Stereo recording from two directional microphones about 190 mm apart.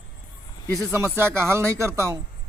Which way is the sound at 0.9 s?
15° right (ahead or behind).